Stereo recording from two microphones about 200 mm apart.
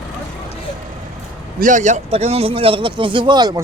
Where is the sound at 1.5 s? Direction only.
40° right (ahead or behind).